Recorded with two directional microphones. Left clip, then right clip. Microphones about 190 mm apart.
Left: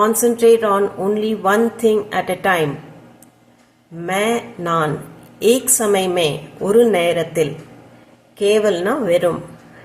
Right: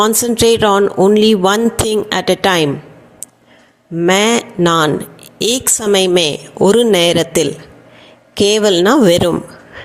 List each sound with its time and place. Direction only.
0.0 s speech: 45° right (ahead or behind)
3.9 s speech: 50° right (ahead or behind)